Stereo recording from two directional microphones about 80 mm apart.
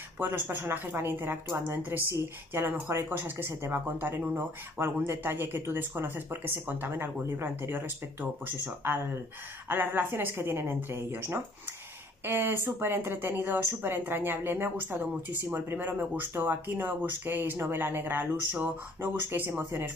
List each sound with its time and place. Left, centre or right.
0.2 s speech: right